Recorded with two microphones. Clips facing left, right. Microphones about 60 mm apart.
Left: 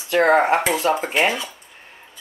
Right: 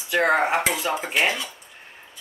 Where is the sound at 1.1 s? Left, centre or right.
Left.